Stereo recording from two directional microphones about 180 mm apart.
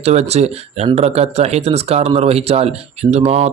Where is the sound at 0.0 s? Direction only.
35° right (ahead or behind).